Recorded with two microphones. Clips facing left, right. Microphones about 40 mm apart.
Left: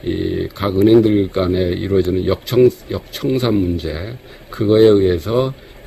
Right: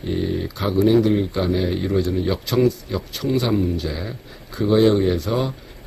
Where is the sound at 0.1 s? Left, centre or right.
Left.